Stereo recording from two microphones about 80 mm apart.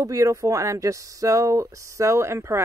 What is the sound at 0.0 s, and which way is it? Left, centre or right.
A woman's voice, right.